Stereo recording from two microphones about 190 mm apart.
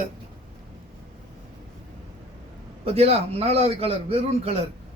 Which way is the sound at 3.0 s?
30° right (ahead or behind).